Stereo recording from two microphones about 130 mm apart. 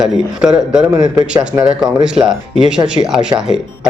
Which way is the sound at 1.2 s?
30° right (ahead or behind).